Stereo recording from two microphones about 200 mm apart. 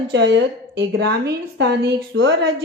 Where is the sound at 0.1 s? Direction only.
60° right (ahead or behind).